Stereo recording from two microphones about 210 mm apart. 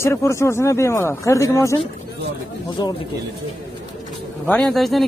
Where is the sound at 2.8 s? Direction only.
20° left (ahead or behind).